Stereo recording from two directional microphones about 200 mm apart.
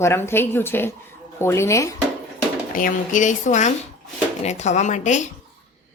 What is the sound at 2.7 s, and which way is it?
A woman's voice, 40° left (ahead or behind).